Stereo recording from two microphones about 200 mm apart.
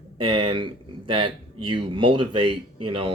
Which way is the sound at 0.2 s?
25° right (ahead or behind).